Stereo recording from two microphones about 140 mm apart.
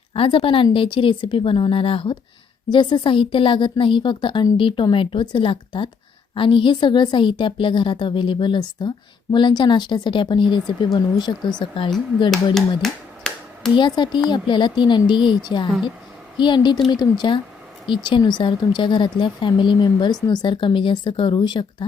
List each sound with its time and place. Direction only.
0.1 s speech: 40° left (ahead or behind)
12.5 s finger snapping: 5° left (ahead or behind)
13.7 s speech: 35° left (ahead or behind)